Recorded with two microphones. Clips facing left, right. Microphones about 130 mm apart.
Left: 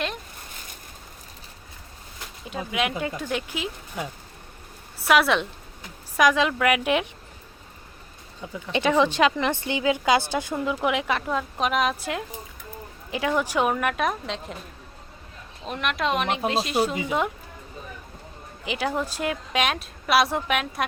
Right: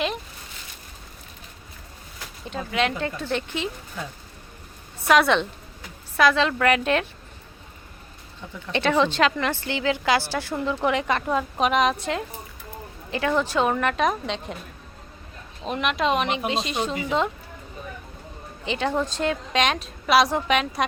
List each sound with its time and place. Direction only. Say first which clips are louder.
2.4 s a woman's voice: right 2 dB; 5° left (ahead or behind)
8.7 s a woman's voice: even; 15° left (ahead or behind)
15.6 s a woman's voice: right 3 dB; centre (ahead or behind)
18.6 s a woman's voice: right 2 dB; 10° left (ahead or behind)